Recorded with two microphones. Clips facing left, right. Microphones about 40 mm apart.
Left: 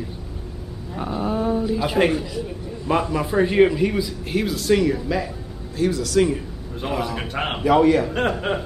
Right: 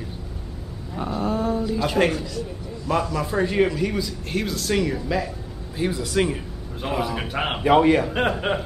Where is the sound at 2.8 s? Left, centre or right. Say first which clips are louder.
Left 2 dB; left; by 5.2 s centre.